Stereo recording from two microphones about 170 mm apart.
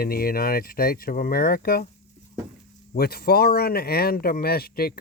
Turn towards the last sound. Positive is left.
turn(degrees=65)  # may be behind; listen again after turning